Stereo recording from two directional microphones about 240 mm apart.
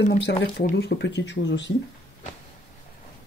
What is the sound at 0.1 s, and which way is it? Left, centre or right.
Speech, left.